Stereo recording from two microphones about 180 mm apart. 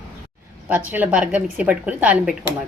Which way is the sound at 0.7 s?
10° right (ahead or behind).